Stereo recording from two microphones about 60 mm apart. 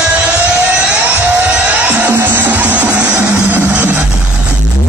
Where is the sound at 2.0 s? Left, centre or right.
Right; by 3.4 s centre.